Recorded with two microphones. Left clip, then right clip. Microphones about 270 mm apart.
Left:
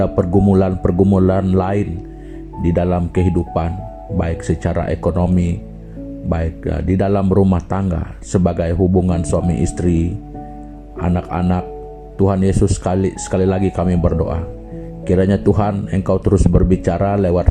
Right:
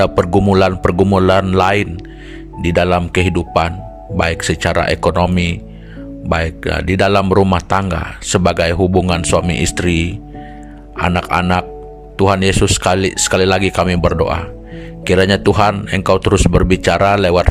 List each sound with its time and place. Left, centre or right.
0.0 s speech: right